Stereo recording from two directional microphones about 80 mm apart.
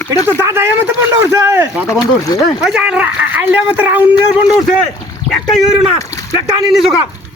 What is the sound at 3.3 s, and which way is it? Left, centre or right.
Speech, right.